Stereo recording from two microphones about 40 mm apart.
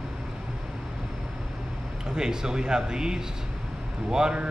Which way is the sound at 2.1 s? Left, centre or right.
Centre.